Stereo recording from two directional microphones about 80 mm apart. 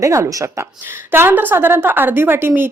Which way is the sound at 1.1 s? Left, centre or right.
Right.